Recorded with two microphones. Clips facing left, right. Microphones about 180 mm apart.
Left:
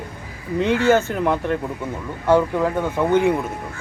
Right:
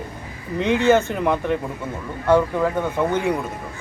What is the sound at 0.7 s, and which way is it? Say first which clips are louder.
Speech: right 1 dB; 20° right (ahead or behind).